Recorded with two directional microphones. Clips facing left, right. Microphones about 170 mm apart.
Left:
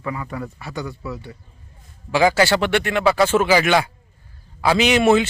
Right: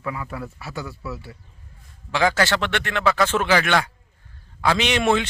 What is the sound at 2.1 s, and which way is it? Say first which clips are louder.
A man's voice: left 4 dB; 10° left (ahead or behind).